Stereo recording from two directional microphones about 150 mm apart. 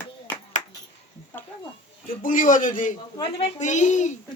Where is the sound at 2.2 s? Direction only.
60° left (ahead or behind).